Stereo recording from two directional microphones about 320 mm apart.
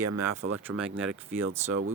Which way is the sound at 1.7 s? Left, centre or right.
Right.